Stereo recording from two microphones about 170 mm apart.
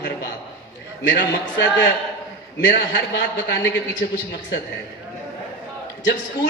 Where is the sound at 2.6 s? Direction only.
75° left (ahead or behind).